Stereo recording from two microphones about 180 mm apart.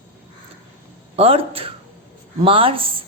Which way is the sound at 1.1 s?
35° right (ahead or behind).